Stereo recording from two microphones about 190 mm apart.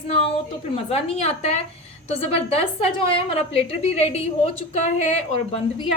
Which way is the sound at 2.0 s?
35° left (ahead or behind).